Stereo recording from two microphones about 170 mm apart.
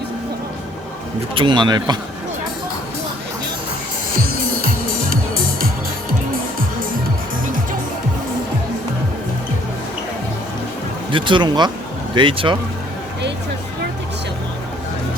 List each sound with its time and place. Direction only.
1.4 s speech: 25° right (ahead or behind)
4.6 s music: 55° right (ahead or behind)
11.1 s speech: 30° right (ahead or behind)